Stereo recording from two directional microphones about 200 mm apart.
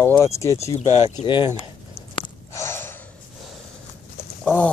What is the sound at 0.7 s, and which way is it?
Speech, 30° left (ahead or behind).